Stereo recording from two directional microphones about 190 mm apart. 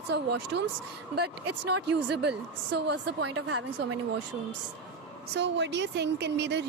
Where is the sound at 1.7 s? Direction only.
60° right (ahead or behind); by 4.0 s 90° right.